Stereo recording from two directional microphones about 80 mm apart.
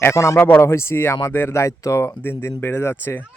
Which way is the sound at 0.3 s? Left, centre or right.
Left.